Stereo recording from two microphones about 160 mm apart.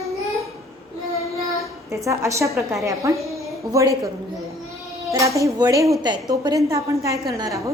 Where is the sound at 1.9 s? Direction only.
20° right (ahead or behind).